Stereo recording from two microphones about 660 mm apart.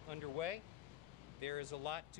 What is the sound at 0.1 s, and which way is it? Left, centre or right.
Speech, right.